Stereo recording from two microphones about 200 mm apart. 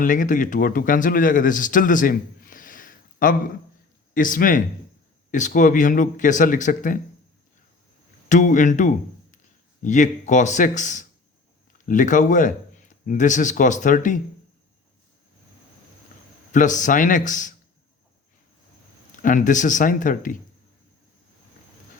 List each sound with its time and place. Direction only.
0.0 s speech: 40° left (ahead or behind)
8.3 s speech: 40° left (ahead or behind)
16.5 s speech: 40° left (ahead or behind)
19.1 s speech: 40° left (ahead or behind)